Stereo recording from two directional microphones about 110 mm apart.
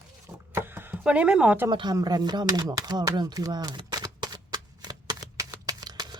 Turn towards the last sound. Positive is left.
turn(degrees=-40)  # may be behind; listen again after turning